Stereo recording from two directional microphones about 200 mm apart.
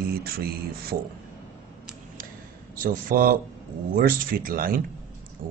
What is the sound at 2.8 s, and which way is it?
Speech, 45° right (ahead or behind).